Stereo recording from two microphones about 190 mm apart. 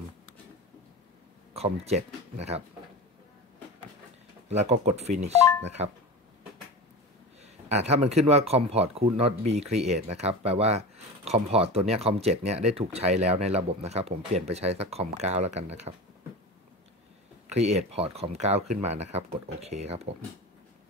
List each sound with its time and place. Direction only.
1.5 s speech: 35° right (ahead or behind)
4.5 s speech: 35° right (ahead or behind)
7.4 s speech: 35° right (ahead or behind)
17.5 s speech: 35° right (ahead or behind)